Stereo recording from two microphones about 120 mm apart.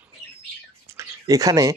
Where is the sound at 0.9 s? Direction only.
25° right (ahead or behind).